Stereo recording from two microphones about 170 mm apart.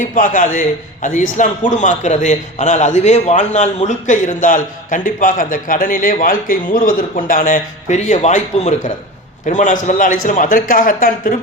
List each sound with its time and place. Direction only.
0.0 s a man's voice: 50° left (ahead or behind)